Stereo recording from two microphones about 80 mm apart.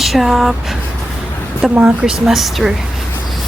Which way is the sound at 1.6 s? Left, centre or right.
Centre.